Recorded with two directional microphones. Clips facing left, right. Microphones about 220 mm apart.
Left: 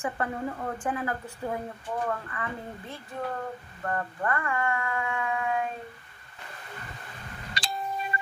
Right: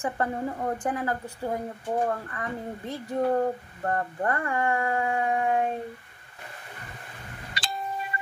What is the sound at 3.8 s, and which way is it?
A woman's voice, 35° right (ahead or behind).